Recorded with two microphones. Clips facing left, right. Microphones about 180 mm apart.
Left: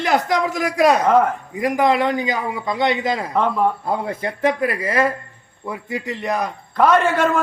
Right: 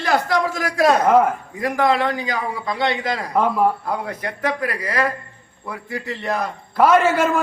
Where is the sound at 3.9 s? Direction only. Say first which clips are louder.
Left 3 dB; 25° left (ahead or behind).